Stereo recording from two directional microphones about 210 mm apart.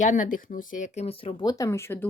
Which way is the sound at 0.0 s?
35° left (ahead or behind).